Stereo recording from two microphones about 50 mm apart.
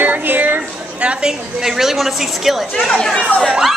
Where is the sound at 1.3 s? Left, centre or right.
Centre.